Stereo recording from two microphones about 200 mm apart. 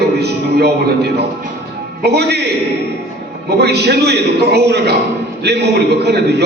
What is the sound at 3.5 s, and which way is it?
Speech, 55° right (ahead or behind).